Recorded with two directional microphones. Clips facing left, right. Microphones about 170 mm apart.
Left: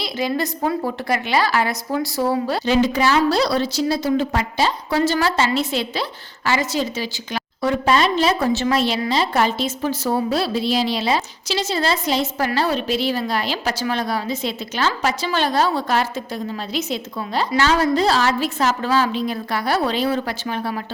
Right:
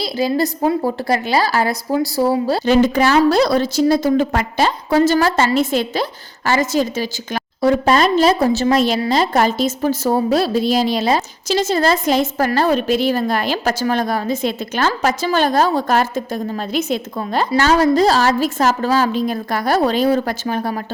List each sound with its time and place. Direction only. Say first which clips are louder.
0.0 s a woman's voice: right 5 dB; 35° right (ahead or behind)
2.6 s a woman's voice: right 4 dB; 50° right (ahead or behind)